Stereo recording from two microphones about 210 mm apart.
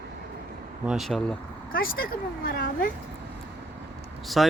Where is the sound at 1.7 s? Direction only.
45° left (ahead or behind).